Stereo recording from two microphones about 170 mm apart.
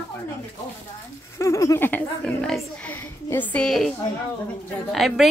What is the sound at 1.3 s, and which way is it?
A woman's voice, 20° left (ahead or behind).